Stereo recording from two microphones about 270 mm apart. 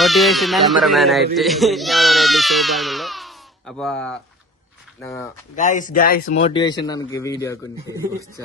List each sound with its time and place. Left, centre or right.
0.0 s speech: centre
5.5 s a man's voice: left; by 7.6 s centre